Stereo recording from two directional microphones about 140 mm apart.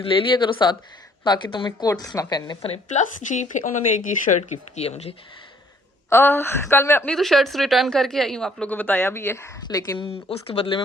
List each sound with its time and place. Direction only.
0.0 s a woman's voice: 35° left (ahead or behind)
2.6 s speech: 45° left (ahead or behind)
3.2 s speech: 60° left (ahead or behind)
6.1 s a woman's voice: 15° left (ahead or behind)
7.1 s a woman's voice: centre (ahead or behind); by 10.0 s 25° left (ahead or behind)
10.3 s speech: 45° left (ahead or behind)